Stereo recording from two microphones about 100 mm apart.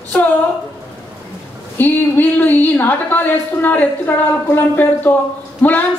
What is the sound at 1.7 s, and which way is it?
A woman's voice, 15° left (ahead or behind).